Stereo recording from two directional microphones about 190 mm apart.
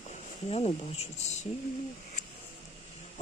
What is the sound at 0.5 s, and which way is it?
Speech, 35° left (ahead or behind).